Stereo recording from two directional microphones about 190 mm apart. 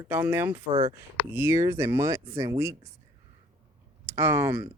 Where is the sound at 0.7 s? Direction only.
30° right (ahead or behind).